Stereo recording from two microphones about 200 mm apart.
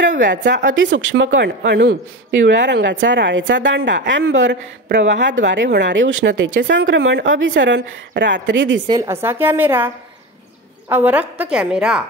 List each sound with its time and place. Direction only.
0.2 s a woman's voice: 65° right (ahead or behind)
8.8 s a woman's voice: 15° right (ahead or behind)